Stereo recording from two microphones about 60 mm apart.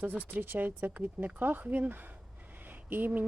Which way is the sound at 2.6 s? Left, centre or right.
Right.